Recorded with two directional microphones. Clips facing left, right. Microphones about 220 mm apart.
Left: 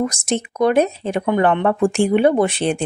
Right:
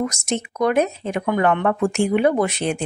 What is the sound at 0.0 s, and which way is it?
A woman's voice, 30° left (ahead or behind).